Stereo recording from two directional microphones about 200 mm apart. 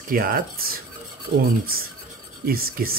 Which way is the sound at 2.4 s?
50° right (ahead or behind).